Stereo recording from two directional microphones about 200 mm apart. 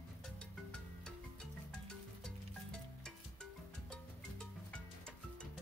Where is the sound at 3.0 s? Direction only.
5° left (ahead or behind).